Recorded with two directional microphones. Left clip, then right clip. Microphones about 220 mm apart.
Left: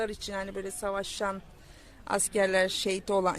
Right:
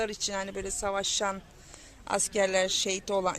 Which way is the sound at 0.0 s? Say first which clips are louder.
Right 2 dB; centre (ahead or behind).